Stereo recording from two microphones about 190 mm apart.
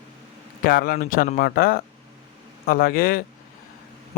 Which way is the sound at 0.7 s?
50° left (ahead or behind).